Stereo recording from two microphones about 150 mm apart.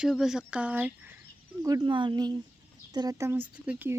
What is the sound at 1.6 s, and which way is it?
Speech, 25° right (ahead or behind).